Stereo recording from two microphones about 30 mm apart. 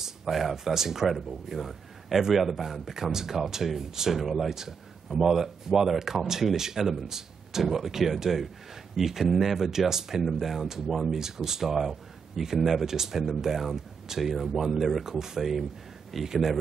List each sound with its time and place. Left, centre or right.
0.0 s a man's voice: centre
15.1 s a man's voice: centre